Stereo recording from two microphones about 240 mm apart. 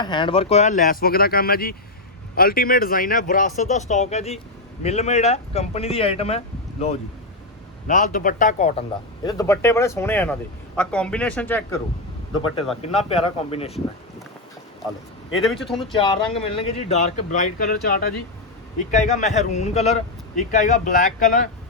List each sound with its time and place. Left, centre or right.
0.0 s speech: centre
9.2 s speech: centre
13.1 s speech: left
15.6 s speech: left